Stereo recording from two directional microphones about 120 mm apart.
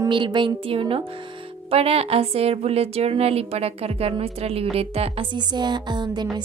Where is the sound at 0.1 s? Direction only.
40° right (ahead or behind).